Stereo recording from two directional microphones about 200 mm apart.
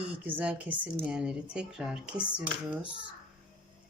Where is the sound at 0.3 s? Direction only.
5° right (ahead or behind).